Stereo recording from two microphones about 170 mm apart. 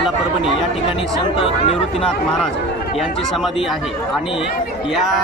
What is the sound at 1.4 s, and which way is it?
Speech, 35° left (ahead or behind).